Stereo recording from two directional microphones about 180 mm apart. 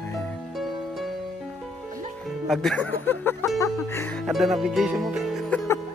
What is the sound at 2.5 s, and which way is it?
Speech, centre (ahead or behind).